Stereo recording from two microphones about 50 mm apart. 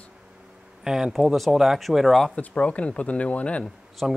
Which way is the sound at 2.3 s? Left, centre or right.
Left.